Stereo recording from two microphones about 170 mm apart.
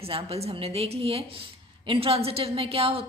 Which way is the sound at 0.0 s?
35° right (ahead or behind).